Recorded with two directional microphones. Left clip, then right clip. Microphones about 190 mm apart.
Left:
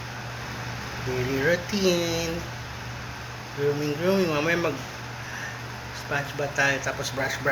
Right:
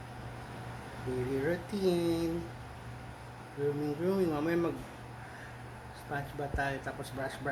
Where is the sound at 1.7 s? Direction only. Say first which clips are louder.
Left 7 dB; 20° right (ahead or behind).